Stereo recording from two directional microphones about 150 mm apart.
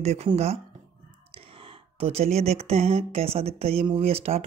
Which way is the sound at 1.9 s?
40° right (ahead or behind).